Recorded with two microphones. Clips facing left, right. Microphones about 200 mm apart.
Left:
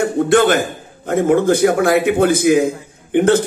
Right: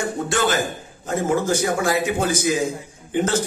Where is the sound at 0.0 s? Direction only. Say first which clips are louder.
Left 9 dB; 60° left (ahead or behind).